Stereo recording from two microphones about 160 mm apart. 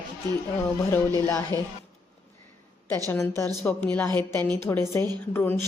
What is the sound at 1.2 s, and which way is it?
Speech, 15° left (ahead or behind).